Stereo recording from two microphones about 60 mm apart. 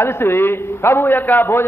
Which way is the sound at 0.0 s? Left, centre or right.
Left.